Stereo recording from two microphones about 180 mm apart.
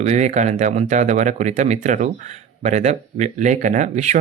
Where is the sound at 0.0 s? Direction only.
35° right (ahead or behind).